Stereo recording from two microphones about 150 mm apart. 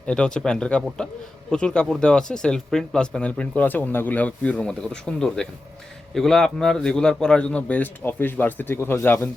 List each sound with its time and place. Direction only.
0.0 s a man's voice: 5° left (ahead or behind)